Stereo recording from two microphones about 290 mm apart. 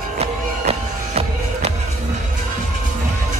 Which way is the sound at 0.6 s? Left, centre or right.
Right.